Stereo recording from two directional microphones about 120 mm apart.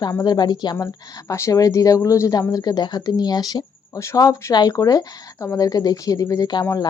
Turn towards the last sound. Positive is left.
turn(degrees=30)  # may be behind; listen again after turning